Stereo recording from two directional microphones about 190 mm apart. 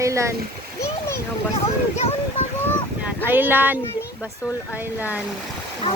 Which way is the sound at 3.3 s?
10° right (ahead or behind).